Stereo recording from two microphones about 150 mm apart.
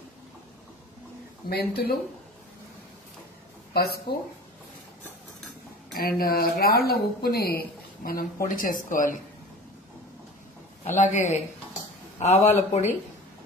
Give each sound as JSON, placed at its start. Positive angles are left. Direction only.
{"t": 1.5, "sound": "speech", "side_deg": 90}
{"t": 4.1, "sound": "speech", "side_deg": 90}
{"t": 5.9, "sound": "speech", "side_deg": 80}
{"t": 10.8, "sound": "a man's voice", "side_deg": 50}